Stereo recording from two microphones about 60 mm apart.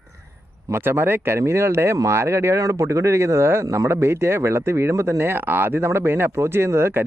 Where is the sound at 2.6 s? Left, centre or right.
Right.